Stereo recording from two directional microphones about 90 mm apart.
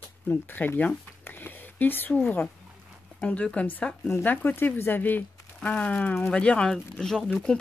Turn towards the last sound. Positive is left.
turn(degrees=0)  # may be behind; listen again after turning